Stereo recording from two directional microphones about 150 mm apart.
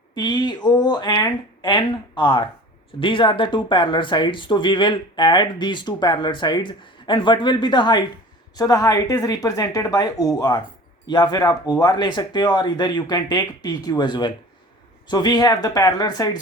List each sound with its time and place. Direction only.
0.1 s speech: 30° left (ahead or behind)